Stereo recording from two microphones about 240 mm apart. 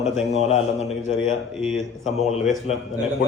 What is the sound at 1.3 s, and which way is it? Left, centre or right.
Speech, centre.